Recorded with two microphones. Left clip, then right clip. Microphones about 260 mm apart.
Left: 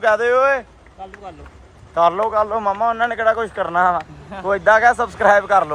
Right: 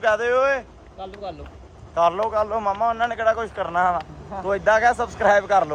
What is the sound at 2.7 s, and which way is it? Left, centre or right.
Speech, left.